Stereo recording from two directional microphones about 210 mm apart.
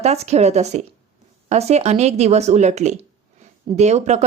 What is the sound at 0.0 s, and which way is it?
Speech, 30° right (ahead or behind).